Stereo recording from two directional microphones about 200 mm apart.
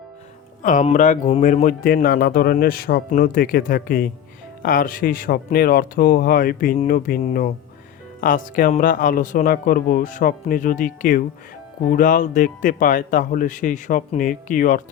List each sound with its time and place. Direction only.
0.6 s speech: 40° left (ahead or behind)